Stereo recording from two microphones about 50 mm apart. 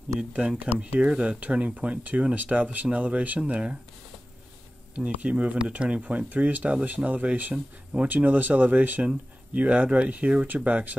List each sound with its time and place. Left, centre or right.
0.7 s speech: right
4.9 s speech: right
7.5 s speech: right